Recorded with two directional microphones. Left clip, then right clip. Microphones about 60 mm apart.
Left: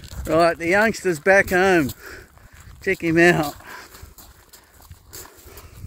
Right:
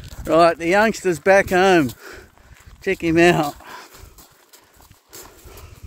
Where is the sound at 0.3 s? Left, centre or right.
Right.